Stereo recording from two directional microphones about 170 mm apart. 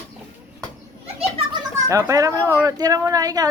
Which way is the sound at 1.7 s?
20° right (ahead or behind).